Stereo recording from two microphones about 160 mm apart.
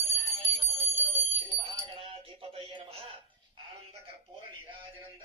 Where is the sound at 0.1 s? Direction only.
40° right (ahead or behind).